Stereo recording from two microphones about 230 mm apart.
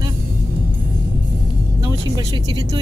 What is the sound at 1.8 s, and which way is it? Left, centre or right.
Speech, centre.